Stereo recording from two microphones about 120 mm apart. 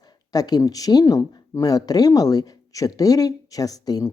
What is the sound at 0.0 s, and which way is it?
Speech, 35° left (ahead or behind).